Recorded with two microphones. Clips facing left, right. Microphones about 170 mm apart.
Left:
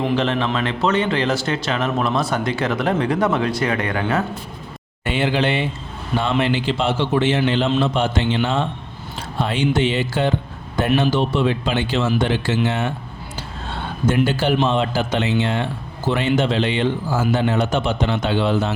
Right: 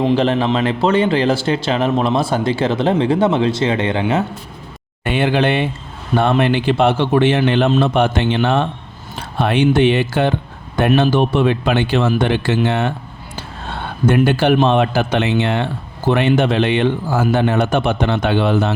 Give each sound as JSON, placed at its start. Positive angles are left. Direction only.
{"t": 0.2, "sound": "a man's voice", "side_deg": -35}
{"t": 5.0, "sound": "a man's voice", "side_deg": -55}
{"t": 14.1, "sound": "a man's voice", "side_deg": -60}